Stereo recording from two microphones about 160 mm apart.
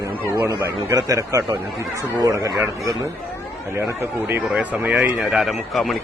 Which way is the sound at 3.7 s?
15° right (ahead or behind).